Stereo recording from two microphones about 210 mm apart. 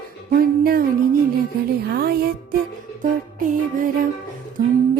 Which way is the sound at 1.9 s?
45° right (ahead or behind).